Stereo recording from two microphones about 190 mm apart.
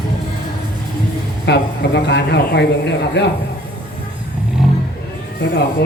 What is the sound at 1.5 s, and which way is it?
Speech, 60° left (ahead or behind).